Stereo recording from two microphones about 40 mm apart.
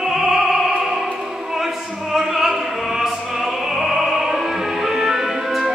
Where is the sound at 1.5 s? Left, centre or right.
Centre.